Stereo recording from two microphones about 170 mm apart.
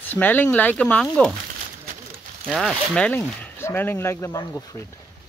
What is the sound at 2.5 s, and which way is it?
Speech, centre (ahead or behind).